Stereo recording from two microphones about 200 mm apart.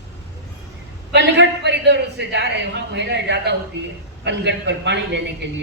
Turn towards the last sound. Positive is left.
turn(degrees=-60)  # may be behind; listen again after turning